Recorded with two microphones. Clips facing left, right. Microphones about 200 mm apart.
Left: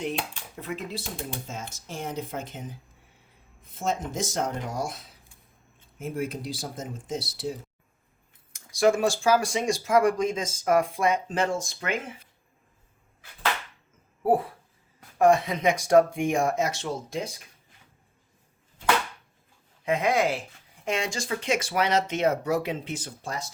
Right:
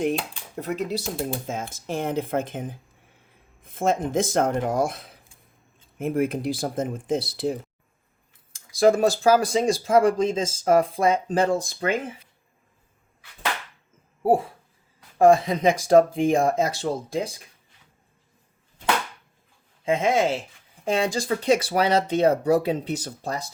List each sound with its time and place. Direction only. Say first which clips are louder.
0.0 s speech: right 6 dB; 45° right (ahead or behind)
1.9 s speech: right 8 dB; 55° right (ahead or behind)
8.8 s speech: right 4 dB; 35° right (ahead or behind)
14.2 s a sound: right 3 dB; 25° right (ahead or behind)
15.2 s speech: right 4 dB; 30° right (ahead or behind)
19.8 s speech: right 3 dB; 25° right (ahead or behind)